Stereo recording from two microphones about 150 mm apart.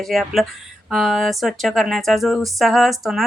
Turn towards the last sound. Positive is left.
turn(degrees=0)  # may be behind; listen again after turning